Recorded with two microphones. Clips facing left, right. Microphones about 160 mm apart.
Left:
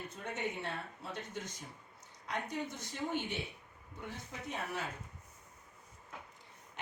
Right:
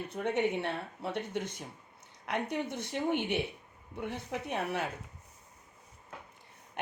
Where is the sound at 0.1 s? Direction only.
65° right (ahead or behind).